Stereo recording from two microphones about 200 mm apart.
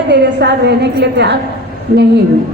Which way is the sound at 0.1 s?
60° right (ahead or behind).